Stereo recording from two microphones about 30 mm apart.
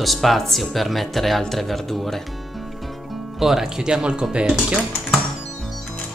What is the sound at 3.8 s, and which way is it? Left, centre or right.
Speech, right.